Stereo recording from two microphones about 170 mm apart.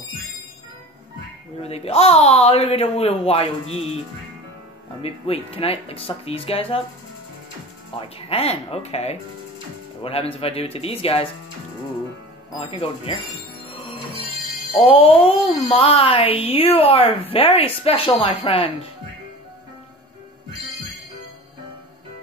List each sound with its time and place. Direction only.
1.6 s speech: 35° left (ahead or behind)
5.0 s speech: 35° left (ahead or behind)
7.9 s speech: 35° left (ahead or behind)
12.5 s speech: 30° left (ahead or behind)
14.7 s speech: 35° left (ahead or behind)